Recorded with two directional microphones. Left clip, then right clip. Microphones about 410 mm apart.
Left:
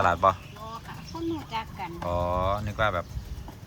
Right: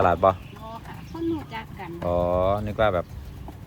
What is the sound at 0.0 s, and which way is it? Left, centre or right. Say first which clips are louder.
Speech: right 3 dB; centre.